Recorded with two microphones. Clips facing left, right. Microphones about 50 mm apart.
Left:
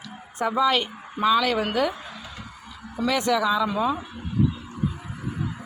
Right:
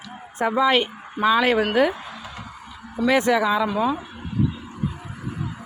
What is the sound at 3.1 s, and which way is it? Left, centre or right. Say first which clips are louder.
Speech: right 3 dB; right.